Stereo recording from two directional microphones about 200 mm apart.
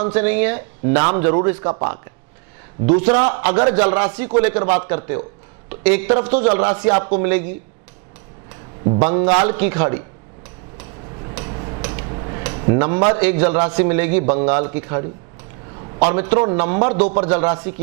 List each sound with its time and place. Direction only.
0.0 s a man's voice: 10° right (ahead or behind)
9.0 s a man's voice: 10° right (ahead or behind)
11.2 s hammer: 25° right (ahead or behind)
11.8 s a sound: 15° right (ahead or behind)
12.0 s a man's voice: 25° right (ahead or behind)